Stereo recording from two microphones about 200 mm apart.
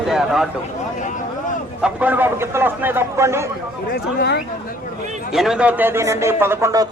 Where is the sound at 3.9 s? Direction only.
55° left (ahead or behind).